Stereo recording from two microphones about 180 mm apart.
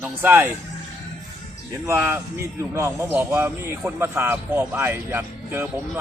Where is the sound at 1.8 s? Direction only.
15° right (ahead or behind).